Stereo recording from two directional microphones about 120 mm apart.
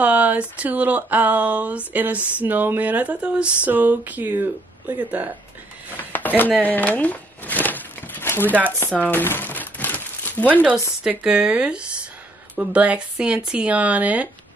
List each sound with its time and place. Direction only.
0.0 s speech: 10° right (ahead or behind)
6.1 s speech: 15° left (ahead or behind)
9.0 s crumpling: 15° left (ahead or behind)
10.5 s speech: 15° right (ahead or behind)